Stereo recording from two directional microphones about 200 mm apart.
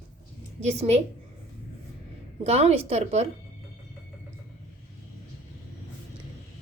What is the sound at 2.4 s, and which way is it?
Speech, 30° right (ahead or behind).